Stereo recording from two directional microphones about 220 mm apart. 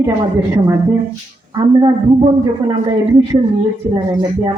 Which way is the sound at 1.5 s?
15° right (ahead or behind).